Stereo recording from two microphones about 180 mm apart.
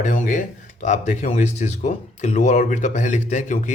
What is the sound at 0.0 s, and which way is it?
A man's voice, 45° left (ahead or behind).